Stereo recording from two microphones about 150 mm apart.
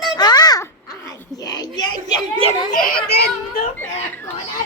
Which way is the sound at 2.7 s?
70° left (ahead or behind).